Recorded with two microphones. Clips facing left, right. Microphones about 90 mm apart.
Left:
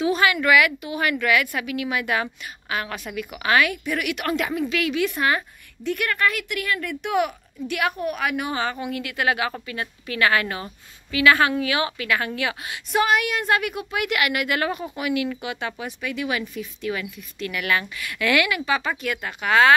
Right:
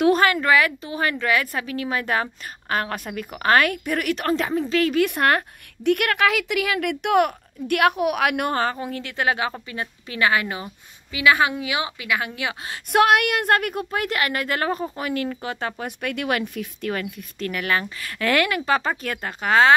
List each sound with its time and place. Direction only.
0.0 s a woman's voice: 45° right (ahead or behind)
5.0 s a woman's voice: 60° right (ahead or behind)
8.6 s a woman's voice: 35° right (ahead or behind); by 12.5 s 20° right (ahead or behind)
12.9 s a woman's voice: 60° right (ahead or behind); by 15.9 s 40° right (ahead or behind)
16.0 s a woman's voice: 55° right (ahead or behind); by 19.7 s 35° right (ahead or behind)